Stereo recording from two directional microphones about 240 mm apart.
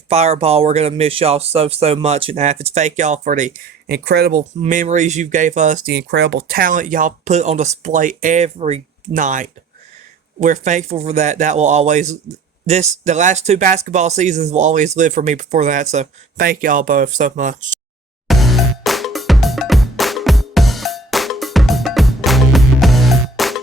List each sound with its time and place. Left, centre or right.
0.1 s speech: right
4.6 s speech: right
18.3 s music: centre